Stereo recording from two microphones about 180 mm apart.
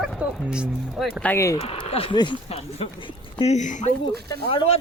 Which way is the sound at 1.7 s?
30° left (ahead or behind).